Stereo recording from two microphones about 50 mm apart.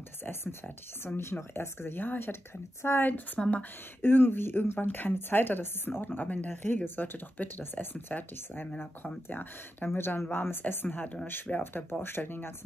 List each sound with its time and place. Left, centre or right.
0.2 s speech: left
2.8 s a woman's voice: left
3.4 s speech: centre
4.0 s speech: left
4.7 s speech: left
9.9 s speech: left